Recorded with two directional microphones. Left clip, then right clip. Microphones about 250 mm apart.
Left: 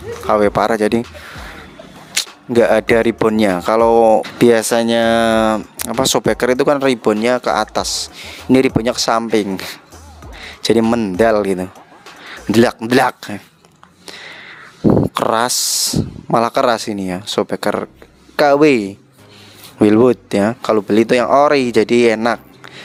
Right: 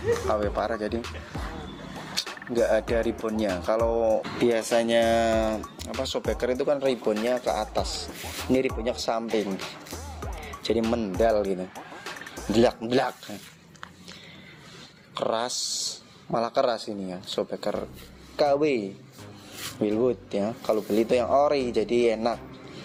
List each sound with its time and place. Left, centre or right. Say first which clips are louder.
0.3 s speech: left 13 dB; left
2.2 s single-lens reflex camera: left 11 dB; left
2.5 s speech: left 12 dB; left
15.1 s speech: left 12 dB; left